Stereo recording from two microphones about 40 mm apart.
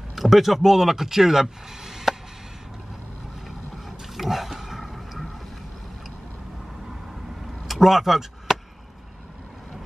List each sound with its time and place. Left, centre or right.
0.1 s speech: centre
4.1 s a sound: centre
7.6 s chop: centre